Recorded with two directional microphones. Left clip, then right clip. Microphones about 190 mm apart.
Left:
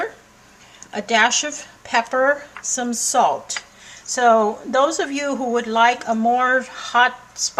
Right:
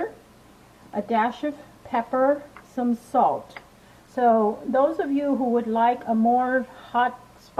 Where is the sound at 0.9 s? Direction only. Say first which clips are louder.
Left 7 dB; 30° left (ahead or behind).